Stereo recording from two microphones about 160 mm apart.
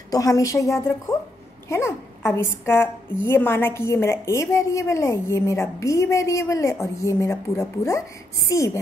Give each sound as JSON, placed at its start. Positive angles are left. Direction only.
{"t": 0.1, "sound": "a woman's voice", "side_deg": 20}